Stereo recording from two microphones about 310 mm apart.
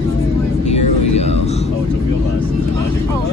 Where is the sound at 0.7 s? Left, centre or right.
Left.